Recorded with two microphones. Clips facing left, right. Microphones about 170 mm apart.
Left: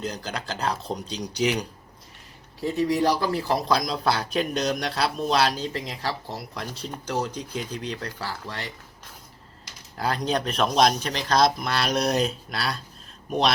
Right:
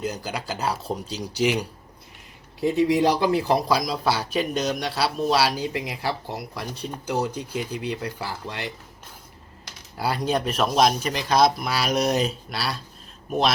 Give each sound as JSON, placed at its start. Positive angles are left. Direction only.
{"t": 0.0, "sound": "speech", "side_deg": -10}
{"t": 2.6, "sound": "speech", "side_deg": -15}
{"t": 3.8, "sound": "speech", "side_deg": -5}
{"t": 10.0, "sound": "speech", "side_deg": -5}